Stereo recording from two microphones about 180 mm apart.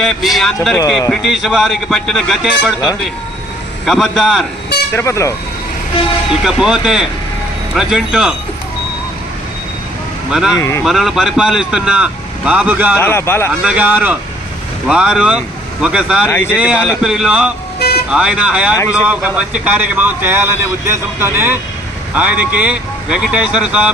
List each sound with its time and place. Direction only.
0.0 s a man's voice: centre (ahead or behind)
4.9 s speech: 15° left (ahead or behind)
6.4 s a man's voice: 5° right (ahead or behind)
10.3 s a man's voice: 5° right (ahead or behind)
10.6 s speech: 15° left (ahead or behind)
10.8 s a man's voice: centre (ahead or behind)
13.0 s speech: 15° left (ahead or behind)
13.5 s a man's voice: 5° right (ahead or behind)
17.7 s vehicle: 60° left (ahead or behind)
18.1 s a man's voice: 5° right (ahead or behind)